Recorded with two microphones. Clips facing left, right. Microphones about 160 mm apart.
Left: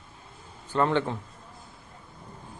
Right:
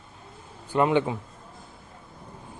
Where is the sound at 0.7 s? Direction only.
15° right (ahead or behind).